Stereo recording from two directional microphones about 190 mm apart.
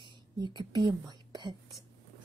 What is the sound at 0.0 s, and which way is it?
A woman's voice, 25° right (ahead or behind).